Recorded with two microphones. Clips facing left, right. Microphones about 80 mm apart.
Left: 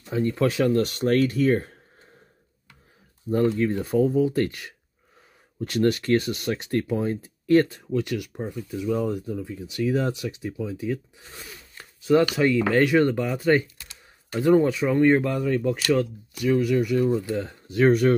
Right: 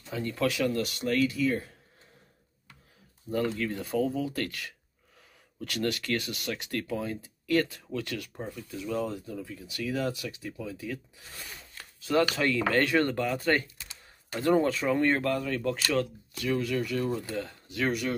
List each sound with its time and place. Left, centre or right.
0.0 s speech: left
3.3 s speech: left
7.8 s speech: centre
11.4 s a sound: left
12.3 s speech: centre
17.8 s speech: left